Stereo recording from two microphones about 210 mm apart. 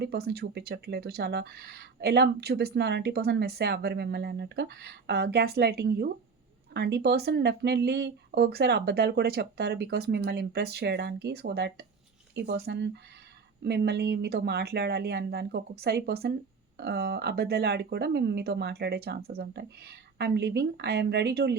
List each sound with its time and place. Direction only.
0.0 s speech: 50° right (ahead or behind)